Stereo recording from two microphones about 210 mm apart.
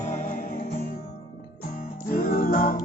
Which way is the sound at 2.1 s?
45° left (ahead or behind).